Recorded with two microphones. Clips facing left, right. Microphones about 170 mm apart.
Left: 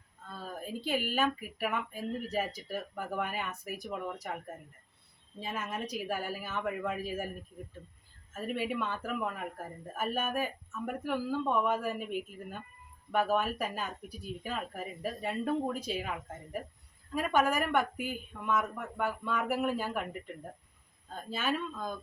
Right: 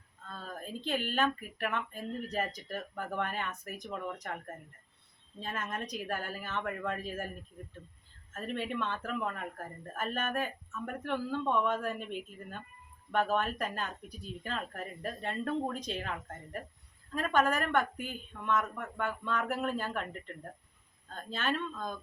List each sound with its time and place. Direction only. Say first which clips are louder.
0.3 s speech: left 2 dB; 10° left (ahead or behind)
8.3 s speech: left 2 dB; 10° left (ahead or behind)